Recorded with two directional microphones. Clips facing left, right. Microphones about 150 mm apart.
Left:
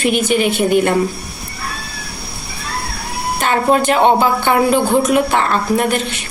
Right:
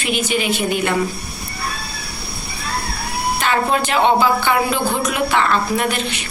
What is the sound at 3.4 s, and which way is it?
A woman's voice, 45° left (ahead or behind).